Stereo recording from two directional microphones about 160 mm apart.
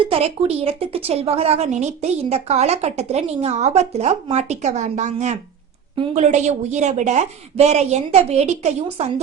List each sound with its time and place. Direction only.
0.0 s a woman's voice: 40° right (ahead or behind)